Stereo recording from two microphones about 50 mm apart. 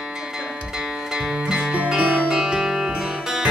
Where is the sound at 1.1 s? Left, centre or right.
Centre.